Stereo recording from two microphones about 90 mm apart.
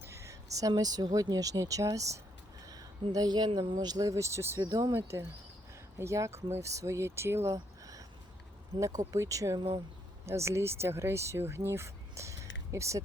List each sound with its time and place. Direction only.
0.0 s a sound: 30° right (ahead or behind)
0.8 s speech: 45° right (ahead or behind)
4.6 s speech: 50° right (ahead or behind)
4.9 s speech: 25° right (ahead or behind)
7.5 s a sound: 40° right (ahead or behind)
8.8 s speech: 35° right (ahead or behind)